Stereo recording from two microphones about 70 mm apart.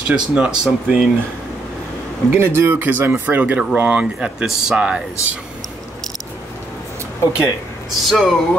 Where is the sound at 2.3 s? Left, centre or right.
Right; by 5.0 s centre.